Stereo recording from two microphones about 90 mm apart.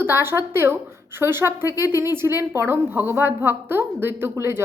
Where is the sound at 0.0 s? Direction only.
25° right (ahead or behind).